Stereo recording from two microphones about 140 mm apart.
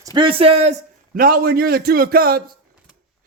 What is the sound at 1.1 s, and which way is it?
A man's voice, 90° right.